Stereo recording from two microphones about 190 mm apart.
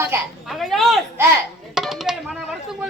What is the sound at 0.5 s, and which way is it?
Speech, centre (ahead or behind).